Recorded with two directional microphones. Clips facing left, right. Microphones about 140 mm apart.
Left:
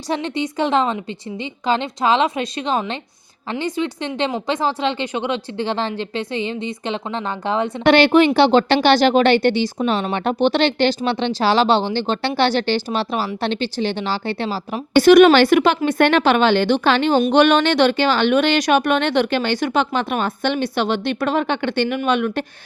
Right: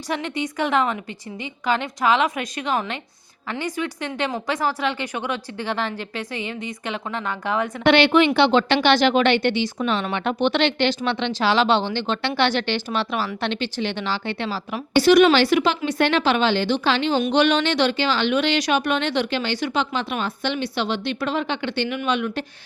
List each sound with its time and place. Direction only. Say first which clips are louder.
0.1 s a woman's voice: left 4 dB; 30° left (ahead or behind)
7.9 s speech: left 3 dB; 40° left (ahead or behind)
14.9 s a woman's voice: left 5 dB; 55° left (ahead or behind)